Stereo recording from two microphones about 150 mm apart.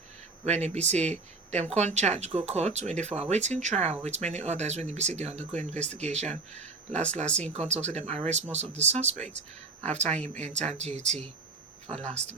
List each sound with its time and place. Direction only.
0.4 s speech: 50° right (ahead or behind)